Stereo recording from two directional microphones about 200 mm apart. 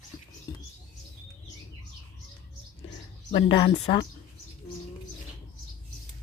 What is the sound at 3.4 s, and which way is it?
Speech, 25° left (ahead or behind).